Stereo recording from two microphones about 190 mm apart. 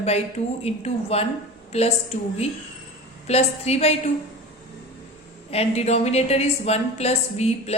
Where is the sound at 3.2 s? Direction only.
35° left (ahead or behind).